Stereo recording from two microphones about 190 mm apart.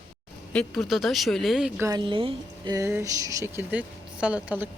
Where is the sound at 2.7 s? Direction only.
15° right (ahead or behind).